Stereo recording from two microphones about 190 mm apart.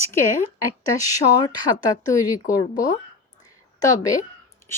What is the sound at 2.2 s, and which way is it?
A woman's voice, 20° left (ahead or behind).